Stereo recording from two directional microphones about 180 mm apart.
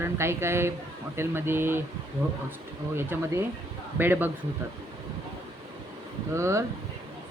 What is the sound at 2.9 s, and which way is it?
Speech, 15° right (ahead or behind).